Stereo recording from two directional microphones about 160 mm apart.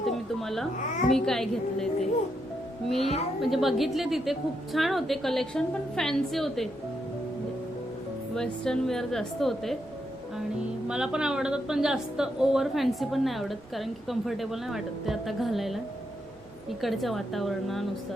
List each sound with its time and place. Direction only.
0.0 s a sound: centre (ahead or behind)
1.1 s a woman's voice: 5° left (ahead or behind)
3.0 s a woman's voice: 40° left (ahead or behind)
3.4 s a woman's voice: centre (ahead or behind)
8.4 s a woman's voice: 5° left (ahead or behind)
10.8 s a woman's voice: 5° right (ahead or behind)
16.8 s a woman's voice: centre (ahead or behind)